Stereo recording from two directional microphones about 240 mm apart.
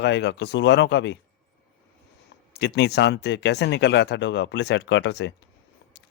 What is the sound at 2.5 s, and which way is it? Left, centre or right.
Speech, left.